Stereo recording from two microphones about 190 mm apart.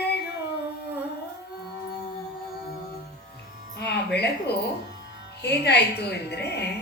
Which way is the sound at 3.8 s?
60° left (ahead or behind).